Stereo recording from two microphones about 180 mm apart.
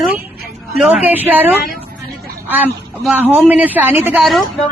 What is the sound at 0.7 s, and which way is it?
A woman's voice, 5° right (ahead or behind).